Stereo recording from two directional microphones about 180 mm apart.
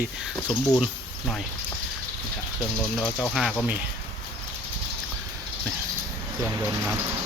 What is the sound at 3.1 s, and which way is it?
Speech, centre (ahead or behind).